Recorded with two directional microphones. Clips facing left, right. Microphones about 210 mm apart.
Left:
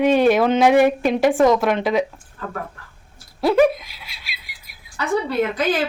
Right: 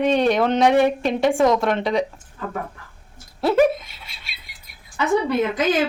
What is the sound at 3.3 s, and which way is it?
Speech, centre (ahead or behind).